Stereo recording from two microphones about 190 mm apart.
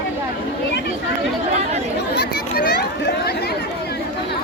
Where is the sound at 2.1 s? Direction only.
60° left (ahead or behind).